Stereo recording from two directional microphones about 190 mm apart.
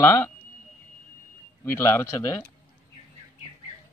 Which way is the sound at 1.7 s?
15° left (ahead or behind).